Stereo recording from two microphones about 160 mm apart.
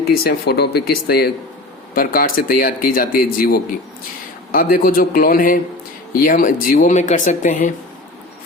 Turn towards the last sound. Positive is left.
turn(degrees=50)  # may be behind; listen again after turning